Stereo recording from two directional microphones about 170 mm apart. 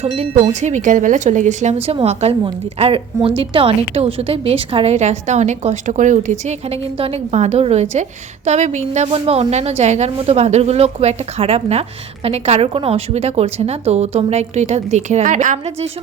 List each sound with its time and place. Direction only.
0.0 s a woman's voice: 40° right (ahead or behind)